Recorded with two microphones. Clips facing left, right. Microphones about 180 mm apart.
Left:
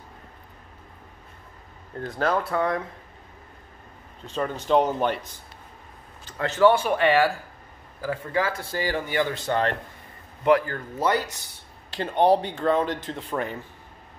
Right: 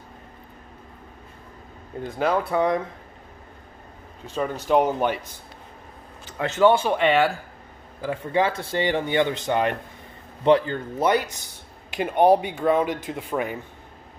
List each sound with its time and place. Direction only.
2.0 s speech: 10° right (ahead or behind)
4.3 s speech: 10° right (ahead or behind)
6.3 s speech: 20° right (ahead or behind)
10.4 s speech: 25° right (ahead or behind)